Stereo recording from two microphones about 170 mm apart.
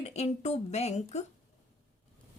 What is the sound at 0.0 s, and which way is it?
A woman's voice, 40° left (ahead or behind).